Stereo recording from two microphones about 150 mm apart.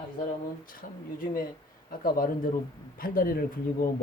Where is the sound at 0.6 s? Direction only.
70° left (ahead or behind).